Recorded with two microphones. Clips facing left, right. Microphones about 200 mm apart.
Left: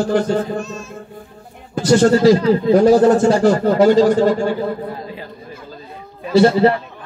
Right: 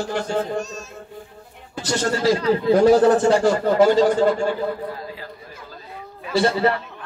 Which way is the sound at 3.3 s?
35° left (ahead or behind).